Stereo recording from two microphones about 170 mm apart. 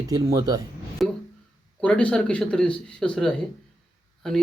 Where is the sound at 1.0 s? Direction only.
Centre (ahead or behind).